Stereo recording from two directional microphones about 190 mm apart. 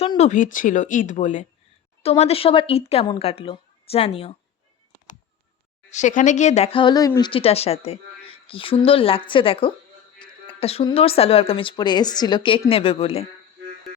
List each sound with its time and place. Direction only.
0.0 s a woman's voice: 35° left (ahead or behind)
5.9 s speech: 40° left (ahead or behind)